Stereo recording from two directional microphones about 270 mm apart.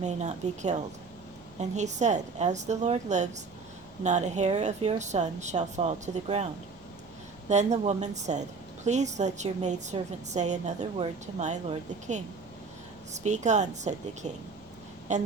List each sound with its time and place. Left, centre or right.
0.0 s a woman's voice: right
13.2 s a woman's voice: right